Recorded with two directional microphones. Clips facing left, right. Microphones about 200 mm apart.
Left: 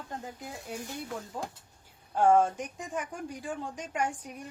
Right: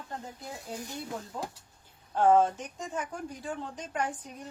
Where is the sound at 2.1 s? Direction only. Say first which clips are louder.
Even; 10° left (ahead or behind).